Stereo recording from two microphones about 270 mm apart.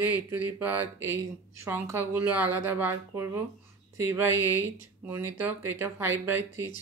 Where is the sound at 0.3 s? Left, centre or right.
Centre.